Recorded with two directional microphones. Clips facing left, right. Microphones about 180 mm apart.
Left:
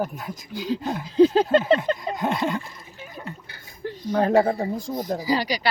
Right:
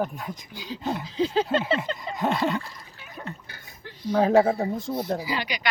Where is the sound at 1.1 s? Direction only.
45° left (ahead or behind).